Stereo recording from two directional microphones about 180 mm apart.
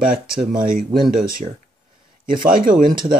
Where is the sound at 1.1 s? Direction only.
50° right (ahead or behind).